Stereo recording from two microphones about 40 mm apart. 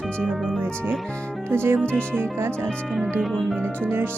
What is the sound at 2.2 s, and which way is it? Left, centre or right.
Speech, right.